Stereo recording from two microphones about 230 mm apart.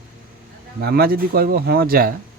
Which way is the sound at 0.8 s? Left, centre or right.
Right.